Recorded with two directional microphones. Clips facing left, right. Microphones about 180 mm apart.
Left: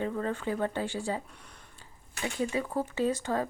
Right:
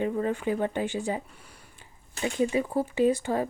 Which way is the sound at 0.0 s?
15° right (ahead or behind).